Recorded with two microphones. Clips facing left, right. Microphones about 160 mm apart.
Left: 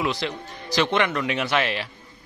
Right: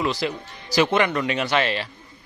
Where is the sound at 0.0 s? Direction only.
Centre (ahead or behind).